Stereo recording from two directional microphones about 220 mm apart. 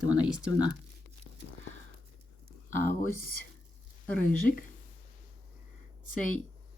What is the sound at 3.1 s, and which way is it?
Speech, 40° left (ahead or behind).